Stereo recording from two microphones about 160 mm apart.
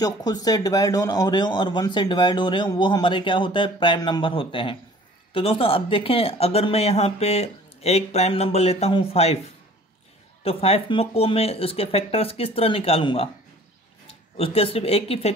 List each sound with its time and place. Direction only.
0.0 s a man's voice: 25° left (ahead or behind)
10.4 s speech: 40° left (ahead or behind)
14.3 s speech: 35° left (ahead or behind)